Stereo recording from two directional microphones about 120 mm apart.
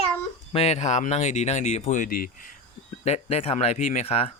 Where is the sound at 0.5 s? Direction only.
65° left (ahead or behind); by 2.0 s 80° left.